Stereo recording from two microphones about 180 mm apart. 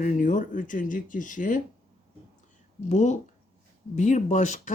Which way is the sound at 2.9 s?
40° left (ahead or behind).